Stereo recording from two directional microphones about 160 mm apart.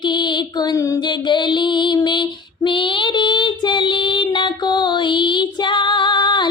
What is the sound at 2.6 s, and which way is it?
Female singing, 30° left (ahead or behind).